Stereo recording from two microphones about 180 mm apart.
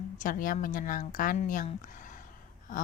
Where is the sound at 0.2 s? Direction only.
50° left (ahead or behind).